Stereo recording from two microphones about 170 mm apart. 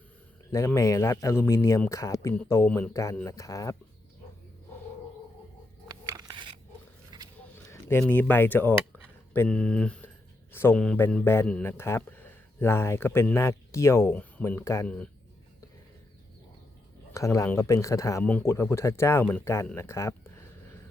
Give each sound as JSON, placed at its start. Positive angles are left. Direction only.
{"t": 0.5, "sound": "a man's voice", "side_deg": 15}
{"t": 2.9, "sound": "a man's voice", "side_deg": 20}
{"t": 5.9, "sound": "a sound", "side_deg": -20}
{"t": 7.7, "sound": "speech", "side_deg": 15}
{"t": 8.9, "sound": "a sound", "side_deg": 10}
{"t": 10.5, "sound": "a man's voice", "side_deg": 15}
{"t": 14.8, "sound": "a man's voice", "side_deg": 5}
{"t": 17.2, "sound": "a man's voice", "side_deg": 20}